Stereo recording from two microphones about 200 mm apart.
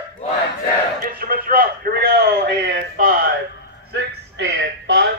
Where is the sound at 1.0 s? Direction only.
45° right (ahead or behind).